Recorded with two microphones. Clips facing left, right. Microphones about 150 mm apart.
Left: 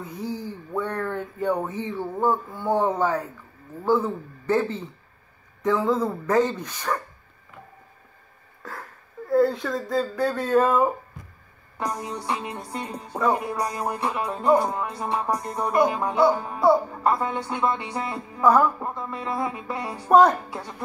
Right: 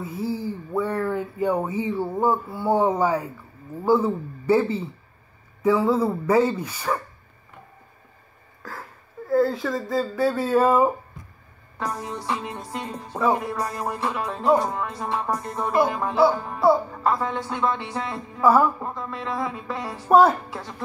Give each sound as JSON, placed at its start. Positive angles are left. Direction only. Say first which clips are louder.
{"t": 0.0, "sound": "speech", "louder": "right 4 dB", "side_deg": -5}
{"t": 8.6, "sound": "speech", "louder": "even", "side_deg": 0}